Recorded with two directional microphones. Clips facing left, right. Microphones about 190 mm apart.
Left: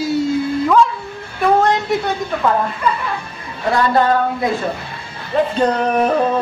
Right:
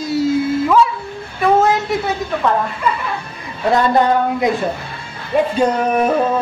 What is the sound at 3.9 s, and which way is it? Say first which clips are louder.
Speech: right 1 dB; 15° right (ahead or behind).